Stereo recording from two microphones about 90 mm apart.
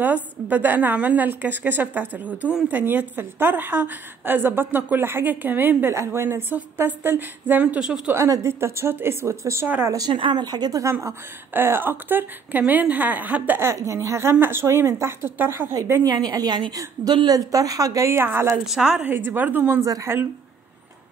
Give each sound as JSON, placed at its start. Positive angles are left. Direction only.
{"t": 0.0, "sound": "a woman's voice", "side_deg": -20}
{"t": 8.1, "sound": "a woman's voice", "side_deg": -35}
{"t": 9.8, "sound": "a woman's voice", "side_deg": -45}
{"t": 10.1, "sound": "a woman's voice", "side_deg": -60}
{"t": 15.7, "sound": "a woman's voice", "side_deg": -35}
{"t": 16.1, "sound": "a woman's voice", "side_deg": -50}
{"t": 18.7, "sound": "a woman's voice", "side_deg": -5}
{"t": 18.9, "sound": "a woman's voice", "side_deg": -20}
{"t": 19.8, "sound": "a woman's voice", "side_deg": -40}